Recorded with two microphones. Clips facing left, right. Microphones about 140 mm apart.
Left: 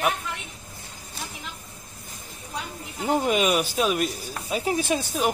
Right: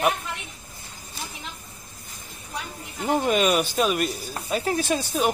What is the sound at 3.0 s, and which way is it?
Speech, 5° left (ahead or behind).